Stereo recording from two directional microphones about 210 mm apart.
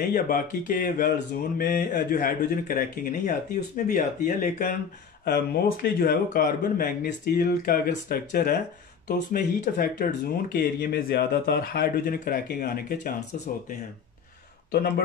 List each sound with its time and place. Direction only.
0.0 s speech: 45° left (ahead or behind)
5.2 s speech: 50° left (ahead or behind)